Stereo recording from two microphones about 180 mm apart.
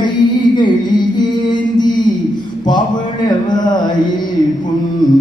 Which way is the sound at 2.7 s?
25° left (ahead or behind).